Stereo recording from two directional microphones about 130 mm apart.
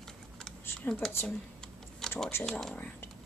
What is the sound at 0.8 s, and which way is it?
Speech, 5° left (ahead or behind).